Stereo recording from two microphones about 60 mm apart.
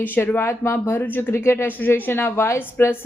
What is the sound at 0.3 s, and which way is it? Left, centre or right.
A woman's voice, left.